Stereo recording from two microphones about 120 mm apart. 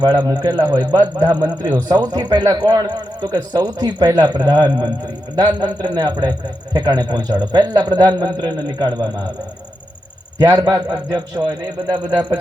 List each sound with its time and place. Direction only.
0.0 s a man's voice: 35° right (ahead or behind)
10.3 s a man's voice: 30° right (ahead or behind)